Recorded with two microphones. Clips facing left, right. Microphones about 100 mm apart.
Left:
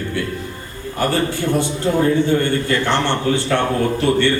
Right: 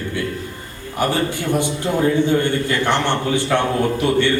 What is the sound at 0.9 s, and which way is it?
A man's voice, 15° right (ahead or behind).